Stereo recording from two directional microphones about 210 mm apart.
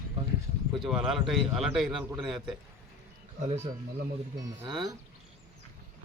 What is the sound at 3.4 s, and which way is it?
Speech, 30° right (ahead or behind).